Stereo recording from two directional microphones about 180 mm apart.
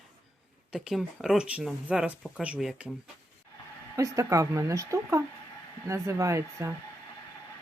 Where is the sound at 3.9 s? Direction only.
15° right (ahead or behind).